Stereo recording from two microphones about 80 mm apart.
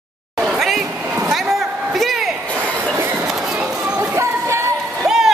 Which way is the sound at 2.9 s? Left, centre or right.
Right.